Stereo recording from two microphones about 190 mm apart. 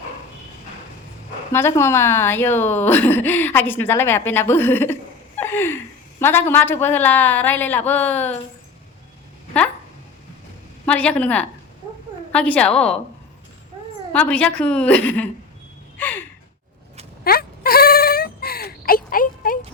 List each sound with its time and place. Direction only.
1.5 s a woman's voice: 15° left (ahead or behind)
10.8 s a woman's voice: 5° left (ahead or behind)
14.1 s a woman's voice: 10° left (ahead or behind)
16.0 s gasp: 10° left (ahead or behind)
17.2 s a sound: 50° left (ahead or behind)